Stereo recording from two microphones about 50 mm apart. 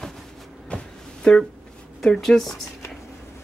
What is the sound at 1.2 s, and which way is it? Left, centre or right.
Speech, centre.